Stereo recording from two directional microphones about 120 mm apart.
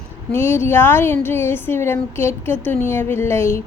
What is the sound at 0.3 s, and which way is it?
A woman's voice, 20° left (ahead or behind).